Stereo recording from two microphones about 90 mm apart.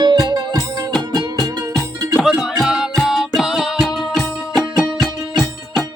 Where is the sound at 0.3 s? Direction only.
50° right (ahead or behind).